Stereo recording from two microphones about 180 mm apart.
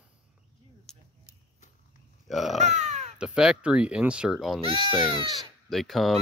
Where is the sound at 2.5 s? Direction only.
40° right (ahead or behind).